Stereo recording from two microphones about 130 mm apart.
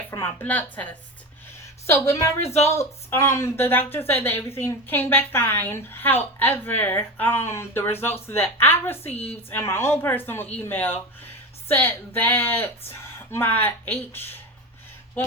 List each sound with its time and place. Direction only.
0.1 s a woman's voice: 20° left (ahead or behind)